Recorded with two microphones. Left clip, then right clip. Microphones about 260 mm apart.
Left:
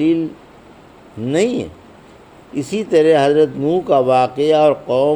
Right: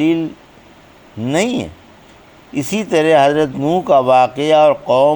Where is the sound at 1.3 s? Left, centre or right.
Right.